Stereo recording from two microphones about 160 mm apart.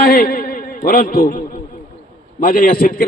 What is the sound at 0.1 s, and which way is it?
A man's voice, 65° left (ahead or behind).